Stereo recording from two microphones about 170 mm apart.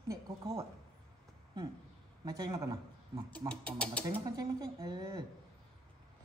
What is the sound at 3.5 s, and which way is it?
Speech, 5° left (ahead or behind).